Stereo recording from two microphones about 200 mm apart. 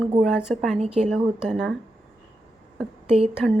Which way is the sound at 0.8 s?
35° right (ahead or behind).